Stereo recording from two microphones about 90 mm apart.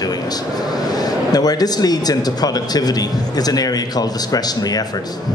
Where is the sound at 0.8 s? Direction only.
45° left (ahead or behind).